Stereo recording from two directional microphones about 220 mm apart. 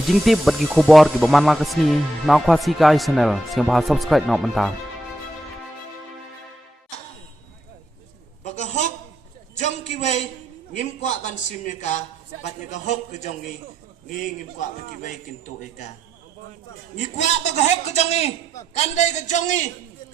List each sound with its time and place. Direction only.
0.1 s speech: centre (ahead or behind)
8.4 s a sound: 30° left (ahead or behind)
10.8 s a man's voice: 35° left (ahead or behind)
17.2 s a man's voice: 30° left (ahead or behind)